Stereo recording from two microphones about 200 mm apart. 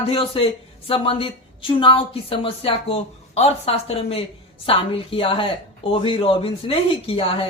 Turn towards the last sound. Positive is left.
turn(degrees=25)  # may be behind; listen again after turning